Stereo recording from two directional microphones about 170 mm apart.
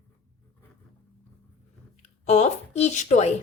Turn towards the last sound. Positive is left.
turn(degrees=40)  # may be behind; listen again after turning